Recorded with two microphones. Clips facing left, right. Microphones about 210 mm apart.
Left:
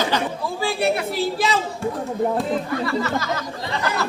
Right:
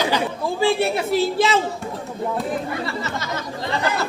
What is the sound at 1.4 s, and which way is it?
Speech, 25° right (ahead or behind).